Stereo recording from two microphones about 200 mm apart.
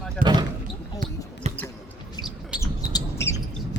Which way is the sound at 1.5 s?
35° right (ahead or behind).